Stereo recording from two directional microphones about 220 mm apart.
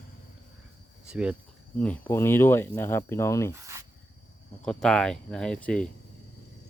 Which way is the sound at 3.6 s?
15° right (ahead or behind).